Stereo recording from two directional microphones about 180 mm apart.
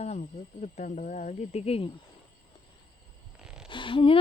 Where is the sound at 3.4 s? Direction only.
5° right (ahead or behind).